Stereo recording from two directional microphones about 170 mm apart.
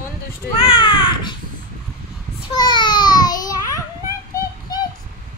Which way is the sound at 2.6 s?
25° left (ahead or behind).